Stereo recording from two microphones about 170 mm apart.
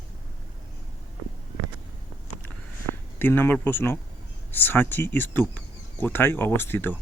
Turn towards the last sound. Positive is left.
turn(degrees=10)  # may be behind; listen again after turning